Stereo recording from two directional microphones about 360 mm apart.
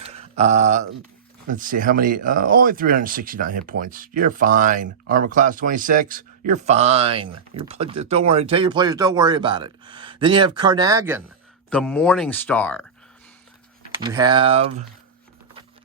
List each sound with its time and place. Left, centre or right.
0.0 s a sound: centre
1.5 s speech: right
11.7 s speech: centre
14.0 s speech: centre